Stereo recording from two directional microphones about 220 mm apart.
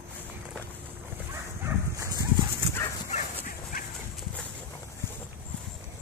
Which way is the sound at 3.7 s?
40° left (ahead or behind).